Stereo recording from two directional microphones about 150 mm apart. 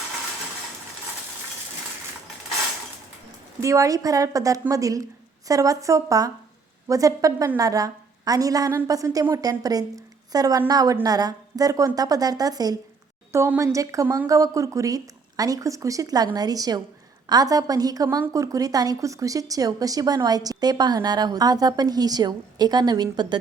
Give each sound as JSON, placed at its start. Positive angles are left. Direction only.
{"t": 3.6, "sound": "a woman's voice", "side_deg": -20}